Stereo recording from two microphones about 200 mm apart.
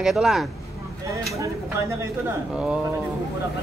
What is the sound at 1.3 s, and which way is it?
Speech, 15° right (ahead or behind).